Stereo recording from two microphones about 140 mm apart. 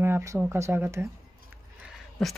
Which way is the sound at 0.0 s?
20° right (ahead or behind).